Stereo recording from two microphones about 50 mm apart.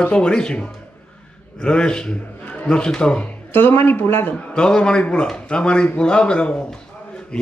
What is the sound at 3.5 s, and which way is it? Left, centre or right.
Speech, left.